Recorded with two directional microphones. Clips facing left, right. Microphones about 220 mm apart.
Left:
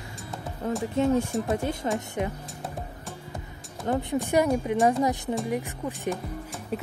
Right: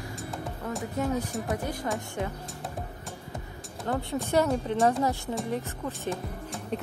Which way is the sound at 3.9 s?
20° left (ahead or behind).